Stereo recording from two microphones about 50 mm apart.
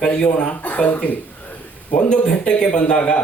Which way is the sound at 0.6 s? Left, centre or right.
Left.